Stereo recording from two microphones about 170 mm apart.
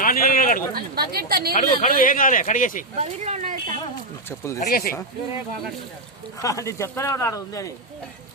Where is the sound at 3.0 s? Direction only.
40° right (ahead or behind).